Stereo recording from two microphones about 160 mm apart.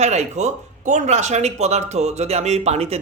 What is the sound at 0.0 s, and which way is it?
Speech, 45° right (ahead or behind).